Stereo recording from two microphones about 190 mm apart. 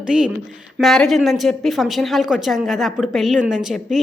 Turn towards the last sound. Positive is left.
turn(degrees=0)  # may be behind; listen again after turning